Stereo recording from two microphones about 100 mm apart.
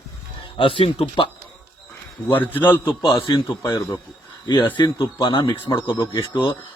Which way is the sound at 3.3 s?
50° left (ahead or behind).